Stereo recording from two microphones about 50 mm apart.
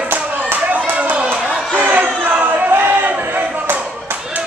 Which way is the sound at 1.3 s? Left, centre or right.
Right.